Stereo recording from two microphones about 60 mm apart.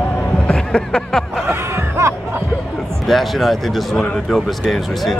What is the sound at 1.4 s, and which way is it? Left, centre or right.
Music, right.